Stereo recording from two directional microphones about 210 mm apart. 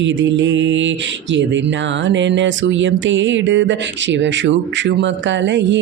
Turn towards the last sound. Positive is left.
turn(degrees=-55)  # may be behind; listen again after turning